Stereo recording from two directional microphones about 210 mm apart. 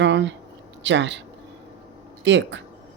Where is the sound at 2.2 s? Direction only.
60° right (ahead or behind).